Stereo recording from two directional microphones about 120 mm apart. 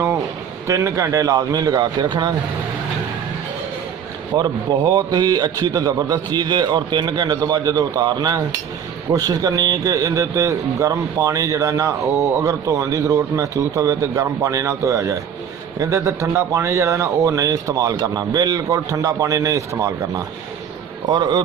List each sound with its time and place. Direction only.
0.7 s a man's voice: 25° right (ahead or behind)
4.4 s a man's voice: 35° right (ahead or behind)
21.1 s a man's voice: 35° right (ahead or behind)